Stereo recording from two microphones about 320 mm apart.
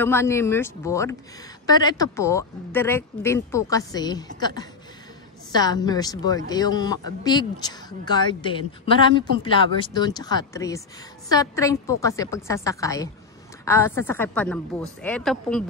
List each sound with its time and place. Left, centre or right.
0.0 s a woman's voice: centre